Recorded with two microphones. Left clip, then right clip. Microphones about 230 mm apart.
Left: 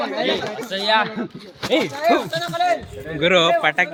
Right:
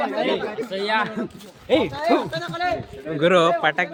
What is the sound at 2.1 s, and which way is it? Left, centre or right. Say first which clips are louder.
Speech: left 4 dB; centre.